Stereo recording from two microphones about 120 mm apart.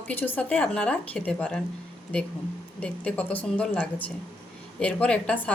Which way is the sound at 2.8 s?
10° left (ahead or behind).